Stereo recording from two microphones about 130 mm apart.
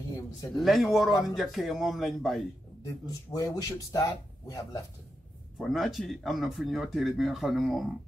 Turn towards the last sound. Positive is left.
turn(degrees=0)  # may be behind; listen again after turning